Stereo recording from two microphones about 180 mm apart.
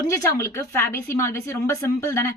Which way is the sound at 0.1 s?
15° left (ahead or behind).